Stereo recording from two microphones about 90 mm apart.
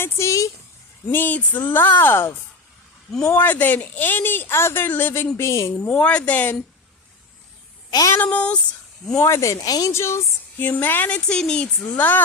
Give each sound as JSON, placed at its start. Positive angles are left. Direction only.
{"t": 0.0, "sound": "speech", "side_deg": 30}
{"t": 1.0, "sound": "speech", "side_deg": 20}
{"t": 5.7, "sound": "speech", "side_deg": 15}
{"t": 7.9, "sound": "a woman's voice", "side_deg": 45}
{"t": 8.1, "sound": "speech", "side_deg": 15}
{"t": 9.1, "sound": "speech", "side_deg": 30}
{"t": 9.9, "sound": "speech", "side_deg": 30}